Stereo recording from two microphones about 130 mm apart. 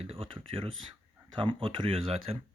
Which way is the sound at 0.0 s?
50° right (ahead or behind).